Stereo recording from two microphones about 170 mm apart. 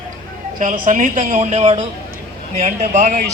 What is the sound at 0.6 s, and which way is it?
A woman's voice, 50° right (ahead or behind).